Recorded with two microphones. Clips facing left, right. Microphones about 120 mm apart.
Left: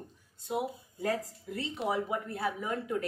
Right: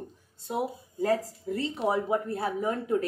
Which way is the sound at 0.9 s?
35° right (ahead or behind).